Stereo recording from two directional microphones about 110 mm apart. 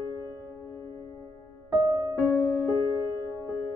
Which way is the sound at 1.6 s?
35° right (ahead or behind).